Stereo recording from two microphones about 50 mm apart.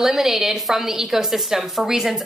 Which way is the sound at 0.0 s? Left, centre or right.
Centre.